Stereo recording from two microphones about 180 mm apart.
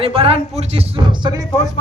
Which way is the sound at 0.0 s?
30° right (ahead or behind).